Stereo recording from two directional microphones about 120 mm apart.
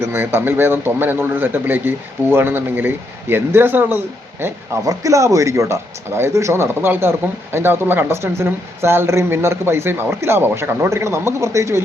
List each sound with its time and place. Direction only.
0.0 s a man's voice: 20° right (ahead or behind)